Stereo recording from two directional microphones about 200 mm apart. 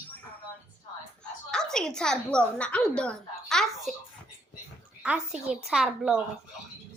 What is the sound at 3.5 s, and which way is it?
Babbling, centre (ahead or behind).